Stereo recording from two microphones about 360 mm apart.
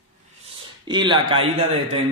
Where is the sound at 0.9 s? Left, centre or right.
Centre.